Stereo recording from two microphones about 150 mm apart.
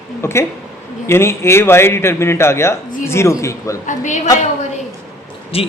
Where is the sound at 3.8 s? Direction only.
55° left (ahead or behind).